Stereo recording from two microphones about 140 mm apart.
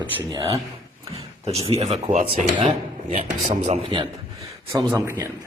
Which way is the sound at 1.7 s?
50° right (ahead or behind).